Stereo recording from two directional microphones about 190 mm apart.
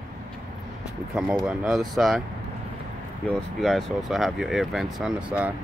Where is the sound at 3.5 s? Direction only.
Centre (ahead or behind).